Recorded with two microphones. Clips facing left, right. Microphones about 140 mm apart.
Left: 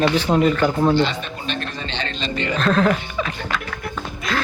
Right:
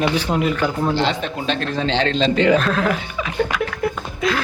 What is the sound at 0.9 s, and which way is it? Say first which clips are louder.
A man's voice: even; 90° right.